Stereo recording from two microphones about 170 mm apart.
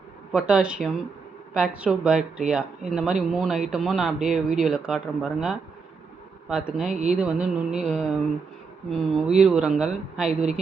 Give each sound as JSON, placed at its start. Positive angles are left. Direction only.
{"t": 0.3, "sound": "speech", "side_deg": -5}
{"t": 6.9, "sound": "speech", "side_deg": -45}
{"t": 7.2, "sound": "speech", "side_deg": -5}